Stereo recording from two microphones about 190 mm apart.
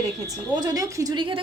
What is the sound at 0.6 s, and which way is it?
Speech, 20° right (ahead or behind).